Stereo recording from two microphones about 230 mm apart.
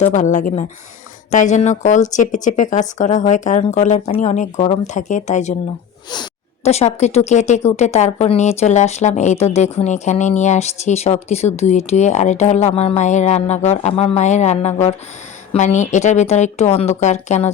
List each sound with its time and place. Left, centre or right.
0.0 s speech: left
6.7 s speech: left